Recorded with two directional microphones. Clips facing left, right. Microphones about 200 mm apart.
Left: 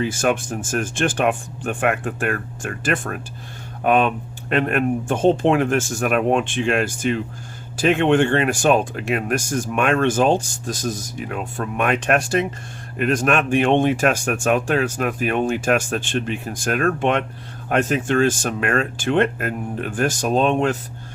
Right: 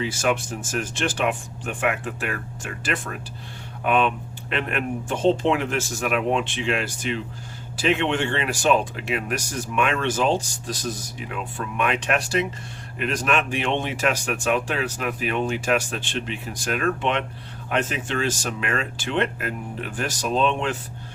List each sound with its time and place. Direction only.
0.0 s speech: 50° left (ahead or behind)